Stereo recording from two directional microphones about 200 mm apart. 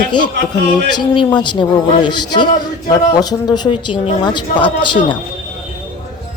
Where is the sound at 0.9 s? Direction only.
20° left (ahead or behind).